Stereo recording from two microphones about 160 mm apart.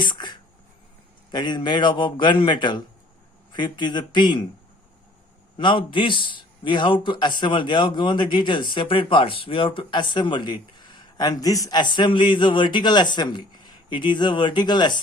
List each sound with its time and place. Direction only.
0.0 s a sound: 25° left (ahead or behind)
1.3 s a man's voice: 25° left (ahead or behind)
5.5 s a man's voice: 30° left (ahead or behind)